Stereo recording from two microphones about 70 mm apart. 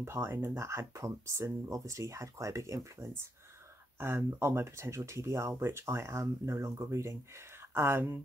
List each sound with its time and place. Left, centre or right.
0.0 s speech: right
4.0 s speech: right